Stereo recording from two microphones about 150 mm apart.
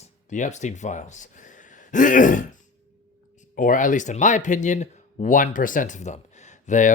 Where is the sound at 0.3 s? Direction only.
55° left (ahead or behind).